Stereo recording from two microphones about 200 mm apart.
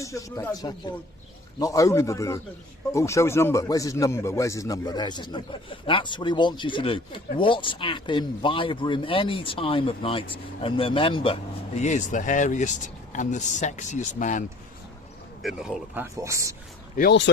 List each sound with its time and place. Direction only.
0.0 s speech: 15° left (ahead or behind); by 14.4 s 40° left (ahead or behind)
15.4 s speech: centre (ahead or behind)
16.1 s a man's voice: 15° right (ahead or behind)
17.0 s speech: 55° left (ahead or behind)